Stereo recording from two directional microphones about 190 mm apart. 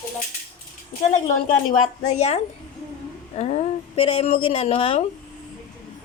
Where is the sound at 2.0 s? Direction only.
35° left (ahead or behind).